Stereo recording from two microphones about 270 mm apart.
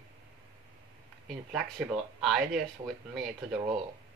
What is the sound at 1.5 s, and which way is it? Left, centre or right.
Speech, centre.